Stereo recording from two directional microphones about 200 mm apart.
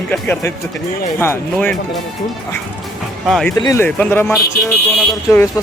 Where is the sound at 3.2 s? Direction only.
Centre (ahead or behind).